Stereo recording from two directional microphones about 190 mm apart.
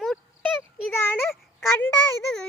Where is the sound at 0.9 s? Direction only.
10° left (ahead or behind).